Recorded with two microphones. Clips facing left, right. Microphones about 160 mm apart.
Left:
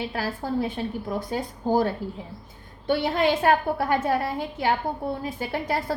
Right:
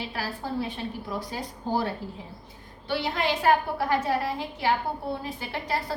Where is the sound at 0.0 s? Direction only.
45° left (ahead or behind).